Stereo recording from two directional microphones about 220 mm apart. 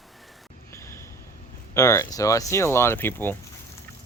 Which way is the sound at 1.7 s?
15° left (ahead or behind).